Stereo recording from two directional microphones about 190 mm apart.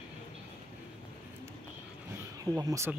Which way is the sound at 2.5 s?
15° right (ahead or behind).